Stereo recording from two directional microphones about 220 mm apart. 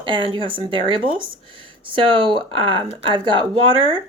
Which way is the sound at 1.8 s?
20° right (ahead or behind).